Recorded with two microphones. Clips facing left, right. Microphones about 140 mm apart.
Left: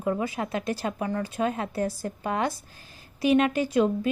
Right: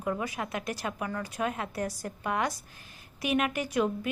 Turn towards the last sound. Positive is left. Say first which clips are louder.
# left 6 dB
turn(degrees=30)  # may be behind; listen again after turning